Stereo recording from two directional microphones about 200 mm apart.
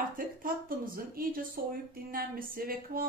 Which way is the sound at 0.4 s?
45° right (ahead or behind).